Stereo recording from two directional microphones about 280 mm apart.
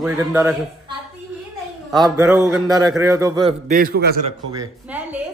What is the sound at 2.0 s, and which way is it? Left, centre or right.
A woman's voice, centre.